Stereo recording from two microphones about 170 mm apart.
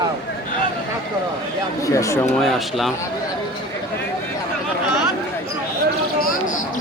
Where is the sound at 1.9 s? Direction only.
15° left (ahead or behind).